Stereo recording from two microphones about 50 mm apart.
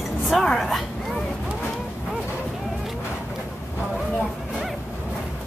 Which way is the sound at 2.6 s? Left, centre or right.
Centre.